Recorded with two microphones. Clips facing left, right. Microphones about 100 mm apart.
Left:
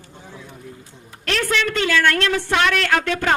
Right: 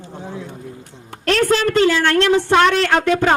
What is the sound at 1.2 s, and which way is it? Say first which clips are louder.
A man's voice: right 6 dB; 35° right (ahead or behind).